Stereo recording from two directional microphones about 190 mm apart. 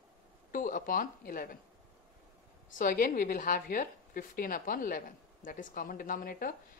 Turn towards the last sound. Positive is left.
turn(degrees=50)  # may be behind; listen again after turning